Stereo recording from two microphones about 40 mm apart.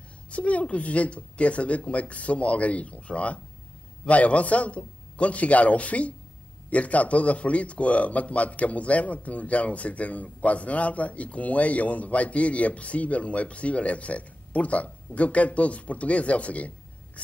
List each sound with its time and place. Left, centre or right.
0.3 s a man's voice: left